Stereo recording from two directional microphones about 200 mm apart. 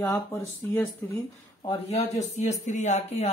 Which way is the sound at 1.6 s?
35° left (ahead or behind).